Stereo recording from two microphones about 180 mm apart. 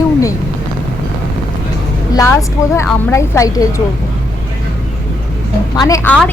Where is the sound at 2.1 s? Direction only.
15° left (ahead or behind).